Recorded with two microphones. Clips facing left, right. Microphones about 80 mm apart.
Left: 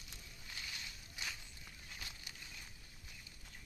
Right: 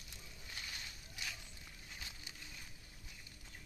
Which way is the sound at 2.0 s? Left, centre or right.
Right.